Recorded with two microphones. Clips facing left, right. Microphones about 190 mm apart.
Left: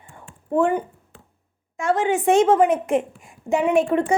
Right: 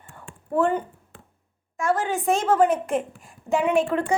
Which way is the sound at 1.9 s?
20° left (ahead or behind).